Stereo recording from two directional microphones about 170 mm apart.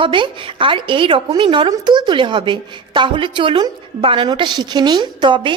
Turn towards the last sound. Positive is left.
turn(degrees=-25)  # may be behind; listen again after turning